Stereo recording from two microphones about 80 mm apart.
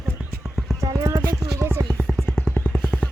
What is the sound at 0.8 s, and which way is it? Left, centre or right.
Clip-clop, right.